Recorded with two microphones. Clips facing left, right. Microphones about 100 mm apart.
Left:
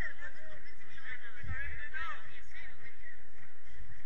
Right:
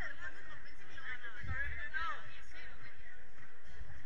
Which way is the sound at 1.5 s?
15° right (ahead or behind).